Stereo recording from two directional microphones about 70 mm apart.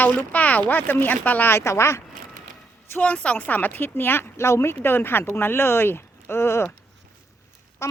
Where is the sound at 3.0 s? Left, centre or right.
Centre; by 6.6 s left.